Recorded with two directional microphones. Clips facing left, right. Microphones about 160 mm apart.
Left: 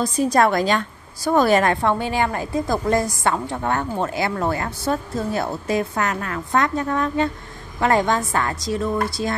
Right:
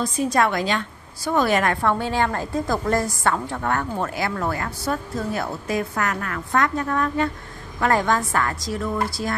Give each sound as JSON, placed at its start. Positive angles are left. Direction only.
{"t": 0.0, "sound": "a woman's voice", "side_deg": 40}